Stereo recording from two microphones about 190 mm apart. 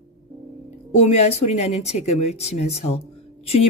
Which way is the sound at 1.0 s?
35° left (ahead or behind).